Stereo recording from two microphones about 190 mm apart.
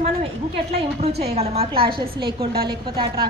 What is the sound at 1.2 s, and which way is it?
A woman's voice, 35° right (ahead or behind).